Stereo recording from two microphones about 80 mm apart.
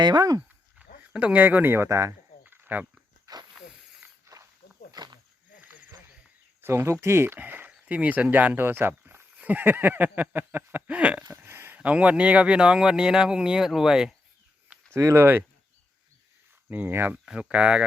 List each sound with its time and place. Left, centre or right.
0.0 s speech: right
0.8 s speech: centre; by 2.1 s right
2.4 s cricket: right
3.3 s snake: right
4.0 s snake: right
4.9 s snake: right
5.5 s snake: right
6.6 s speech: right; by 11.2 s centre
11.4 s a sound: right
11.8 s speech: centre
14.9 s speech: right
16.6 s speech: right
17.2 s speech: centre